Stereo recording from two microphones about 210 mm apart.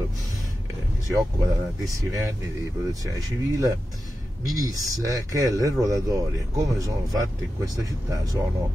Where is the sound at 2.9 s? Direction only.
15° right (ahead or behind).